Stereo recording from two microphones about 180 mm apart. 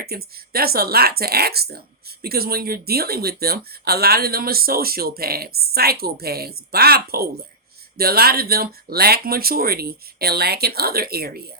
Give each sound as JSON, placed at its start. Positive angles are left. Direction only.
{"t": 0.0, "sound": "speech", "side_deg": -60}